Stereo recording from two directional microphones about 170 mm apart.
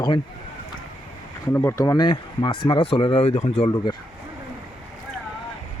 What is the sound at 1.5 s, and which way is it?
Speech, 15° left (ahead or behind).